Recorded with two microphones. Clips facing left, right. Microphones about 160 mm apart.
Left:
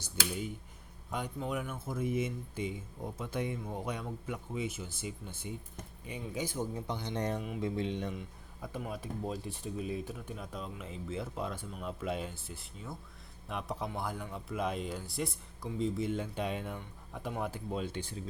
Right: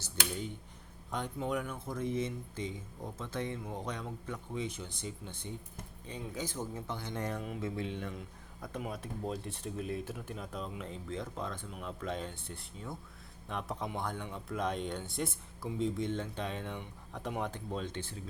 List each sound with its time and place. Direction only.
1.1 s speech: centre (ahead or behind); by 8.1 s 20° left (ahead or behind)
8.1 s speech: 5° left (ahead or behind)